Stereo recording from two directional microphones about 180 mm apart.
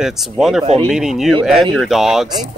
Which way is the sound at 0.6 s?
30° right (ahead or behind).